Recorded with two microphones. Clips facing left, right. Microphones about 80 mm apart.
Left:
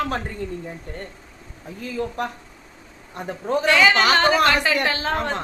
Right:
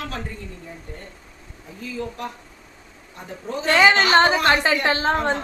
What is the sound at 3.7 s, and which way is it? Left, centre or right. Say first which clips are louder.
A woman's voice: right 1 dB; right.